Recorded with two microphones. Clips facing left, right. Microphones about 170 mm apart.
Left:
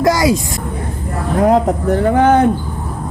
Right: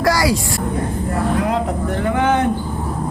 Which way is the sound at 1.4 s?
45° left (ahead or behind).